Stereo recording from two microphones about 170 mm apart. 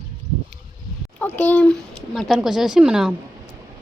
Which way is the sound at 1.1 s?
10° left (ahead or behind).